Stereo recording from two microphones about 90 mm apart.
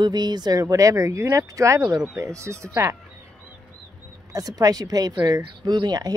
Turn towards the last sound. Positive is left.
turn(degrees=-50)  # may be behind; listen again after turning